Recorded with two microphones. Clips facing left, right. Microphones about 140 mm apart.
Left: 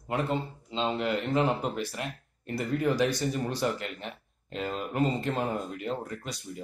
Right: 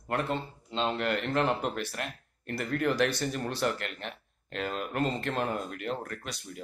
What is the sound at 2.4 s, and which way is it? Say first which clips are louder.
Speech: left 2 dB; 65° right (ahead or behind).